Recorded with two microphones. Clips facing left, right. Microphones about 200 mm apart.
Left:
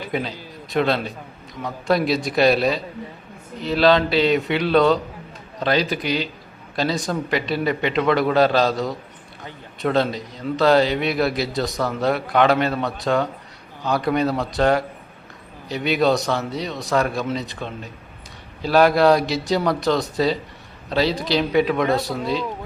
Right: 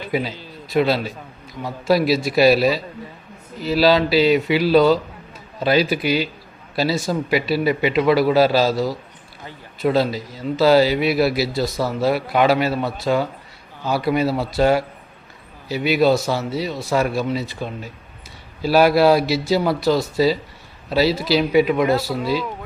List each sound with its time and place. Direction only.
0.1 s a man's voice: 5° right (ahead or behind)
18.6 s a man's voice: 5° right (ahead or behind)